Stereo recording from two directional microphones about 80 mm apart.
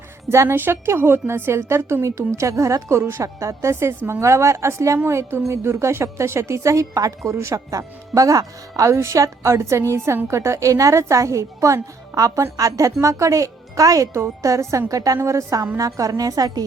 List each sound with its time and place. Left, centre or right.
0.3 s a woman's voice: right